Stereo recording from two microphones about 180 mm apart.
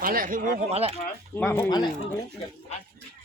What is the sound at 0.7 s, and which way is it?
Speech, 35° right (ahead or behind).